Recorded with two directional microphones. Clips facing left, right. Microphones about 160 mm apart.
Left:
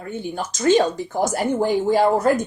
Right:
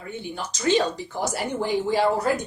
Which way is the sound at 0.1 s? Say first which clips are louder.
Left 5 dB; 45° left (ahead or behind).